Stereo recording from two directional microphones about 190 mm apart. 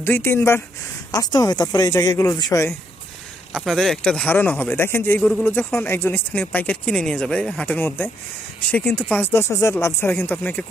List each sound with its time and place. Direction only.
0.0 s speech: 10° left (ahead or behind)
3.5 s speech: centre (ahead or behind)